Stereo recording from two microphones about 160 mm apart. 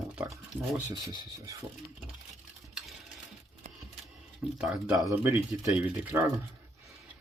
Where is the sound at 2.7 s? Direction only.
Centre (ahead or behind).